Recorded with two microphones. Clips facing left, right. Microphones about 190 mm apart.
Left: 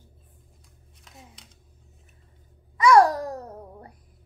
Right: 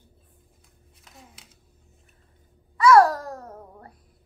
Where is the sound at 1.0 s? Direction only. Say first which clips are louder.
Left 1 dB; 5° right (ahead or behind).